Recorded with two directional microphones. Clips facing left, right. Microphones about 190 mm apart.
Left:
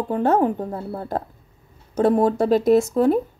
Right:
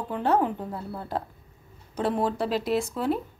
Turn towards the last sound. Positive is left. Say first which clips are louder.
# left 10 dB
turn(degrees=45)  # may be behind; listen again after turning